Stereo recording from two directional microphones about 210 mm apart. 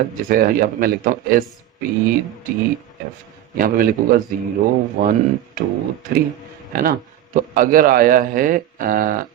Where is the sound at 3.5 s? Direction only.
40° right (ahead or behind).